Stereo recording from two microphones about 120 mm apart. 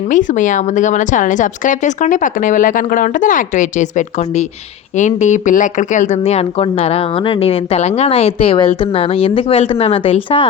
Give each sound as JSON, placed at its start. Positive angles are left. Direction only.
{"t": 0.1, "sound": "a woman's voice", "side_deg": 90}